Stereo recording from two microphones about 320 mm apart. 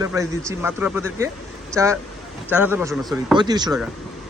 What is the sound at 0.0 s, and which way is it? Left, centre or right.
Speech, centre.